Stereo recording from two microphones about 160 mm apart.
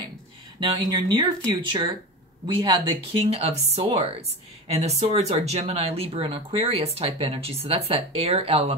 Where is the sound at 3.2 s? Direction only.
40° right (ahead or behind).